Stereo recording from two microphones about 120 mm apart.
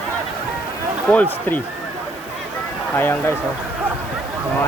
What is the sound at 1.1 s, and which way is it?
Speech, 15° left (ahead or behind).